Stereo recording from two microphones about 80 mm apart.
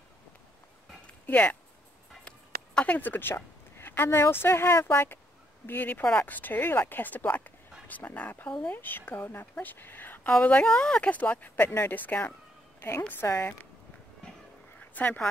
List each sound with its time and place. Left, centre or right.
1.0 s a sound: centre
2.2 s a woman's voice: centre
15.0 s a woman's voice: left